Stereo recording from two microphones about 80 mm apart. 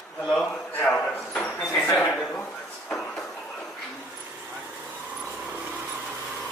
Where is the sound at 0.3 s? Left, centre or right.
Centre.